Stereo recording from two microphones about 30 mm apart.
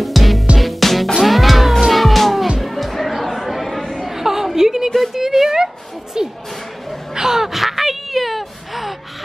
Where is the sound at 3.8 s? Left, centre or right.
Centre.